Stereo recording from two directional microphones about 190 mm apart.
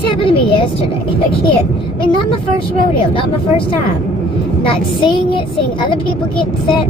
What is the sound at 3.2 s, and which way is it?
A woman's voice, 30° left (ahead or behind).